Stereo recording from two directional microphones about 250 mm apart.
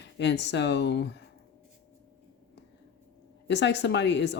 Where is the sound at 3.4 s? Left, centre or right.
Left.